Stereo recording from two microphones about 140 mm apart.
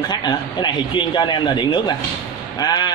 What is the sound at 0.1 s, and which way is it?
A man's voice, 30° left (ahead or behind).